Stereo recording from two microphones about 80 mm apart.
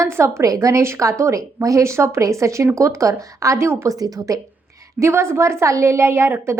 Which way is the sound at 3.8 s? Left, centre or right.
Right.